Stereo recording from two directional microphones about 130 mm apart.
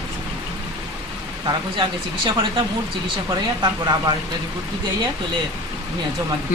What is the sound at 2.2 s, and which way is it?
Speech, 35° right (ahead or behind).